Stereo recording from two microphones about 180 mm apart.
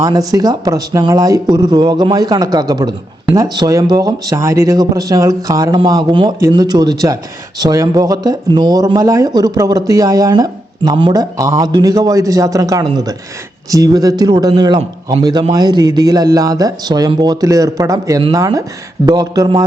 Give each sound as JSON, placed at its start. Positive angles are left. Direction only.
{"t": 0.3, "sound": "speech", "side_deg": -20}